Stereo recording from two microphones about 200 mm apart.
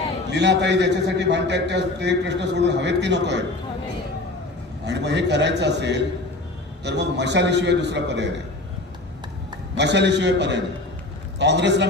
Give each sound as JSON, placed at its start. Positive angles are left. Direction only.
{"t": 0.3, "sound": "a man's voice", "side_deg": -60}
{"t": 4.8, "sound": "a man's voice", "side_deg": -60}
{"t": 9.8, "sound": "a man's voice", "side_deg": -60}